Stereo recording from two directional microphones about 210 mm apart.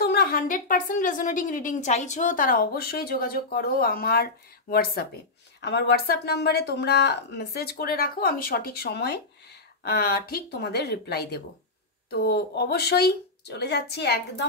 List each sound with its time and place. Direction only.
0.0 s a woman's voice: 45° left (ahead or behind)